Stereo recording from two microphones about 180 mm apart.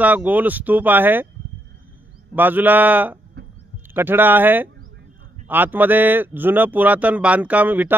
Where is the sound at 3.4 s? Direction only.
65° right (ahead or behind).